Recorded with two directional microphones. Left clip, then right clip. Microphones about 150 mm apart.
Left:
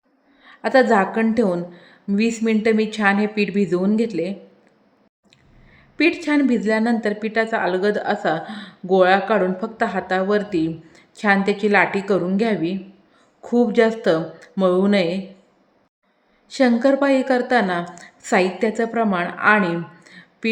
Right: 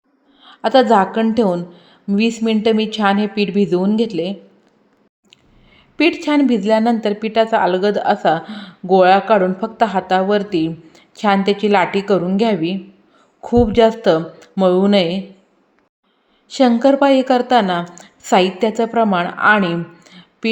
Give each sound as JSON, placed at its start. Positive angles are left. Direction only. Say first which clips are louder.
{"t": 0.4, "sound": "a woman's voice", "louder": "right 3 dB", "side_deg": -20}
{"t": 6.0, "sound": "a woman's voice", "louder": "right 3 dB", "side_deg": -20}
{"t": 16.5, "sound": "a woman's voice", "louder": "right 4 dB", "side_deg": -20}